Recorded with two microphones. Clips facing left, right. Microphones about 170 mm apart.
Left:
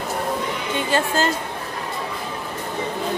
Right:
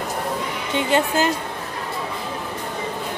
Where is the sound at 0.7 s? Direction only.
20° right (ahead or behind).